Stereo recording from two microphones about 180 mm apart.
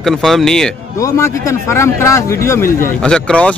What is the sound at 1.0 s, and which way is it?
Speech, 15° left (ahead or behind).